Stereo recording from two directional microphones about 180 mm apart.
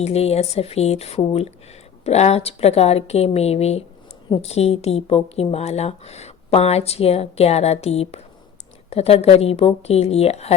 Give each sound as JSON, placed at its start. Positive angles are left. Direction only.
{"t": 0.0, "sound": "speech", "side_deg": 35}